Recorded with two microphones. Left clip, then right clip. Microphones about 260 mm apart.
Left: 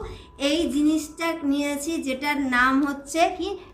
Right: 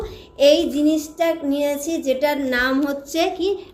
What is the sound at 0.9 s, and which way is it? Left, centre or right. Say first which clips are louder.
A woman's voice: right 5 dB; centre.